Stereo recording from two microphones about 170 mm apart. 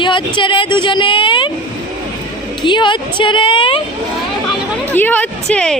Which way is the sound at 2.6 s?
30° left (ahead or behind).